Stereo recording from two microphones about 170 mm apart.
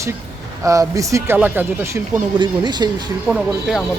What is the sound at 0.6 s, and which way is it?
A man's voice, 20° right (ahead or behind).